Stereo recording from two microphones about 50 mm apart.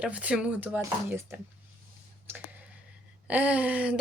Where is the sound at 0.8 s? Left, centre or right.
Right.